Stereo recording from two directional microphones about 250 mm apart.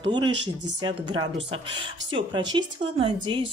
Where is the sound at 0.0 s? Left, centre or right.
Centre.